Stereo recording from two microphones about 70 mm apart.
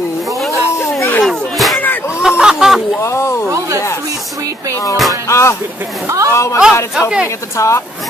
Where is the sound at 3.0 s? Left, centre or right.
Left.